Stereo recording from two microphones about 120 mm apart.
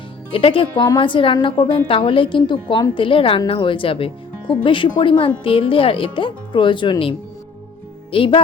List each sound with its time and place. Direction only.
0.3 s speech: 45° left (ahead or behind)